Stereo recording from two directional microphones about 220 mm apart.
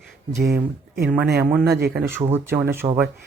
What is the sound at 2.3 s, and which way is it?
Speech, 10° right (ahead or behind).